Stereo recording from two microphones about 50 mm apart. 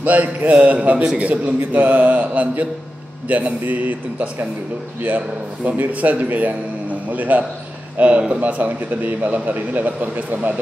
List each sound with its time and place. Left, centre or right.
0.0 s a man's voice: right